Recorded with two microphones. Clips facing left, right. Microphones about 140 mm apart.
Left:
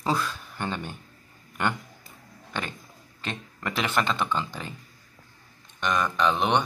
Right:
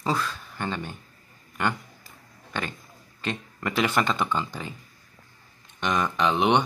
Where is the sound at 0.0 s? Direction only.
5° left (ahead or behind).